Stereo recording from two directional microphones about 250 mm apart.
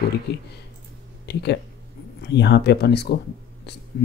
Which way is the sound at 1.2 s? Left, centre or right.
Left.